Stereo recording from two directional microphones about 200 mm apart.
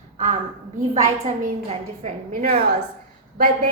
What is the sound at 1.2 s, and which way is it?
A woman's voice, 30° right (ahead or behind).